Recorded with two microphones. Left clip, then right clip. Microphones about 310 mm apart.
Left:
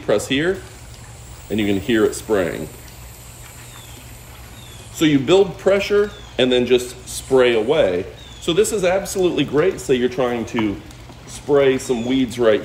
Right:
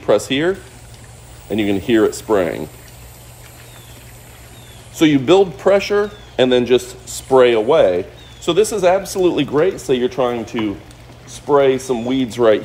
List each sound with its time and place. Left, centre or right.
0.0 s a man's voice: centre
4.9 s a man's voice: right